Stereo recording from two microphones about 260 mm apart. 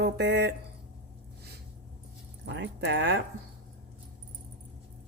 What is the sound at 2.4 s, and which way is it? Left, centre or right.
Speech, right.